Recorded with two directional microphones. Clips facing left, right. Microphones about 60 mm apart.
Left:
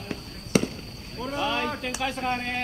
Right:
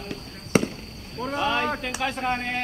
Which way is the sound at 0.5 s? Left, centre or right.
Right.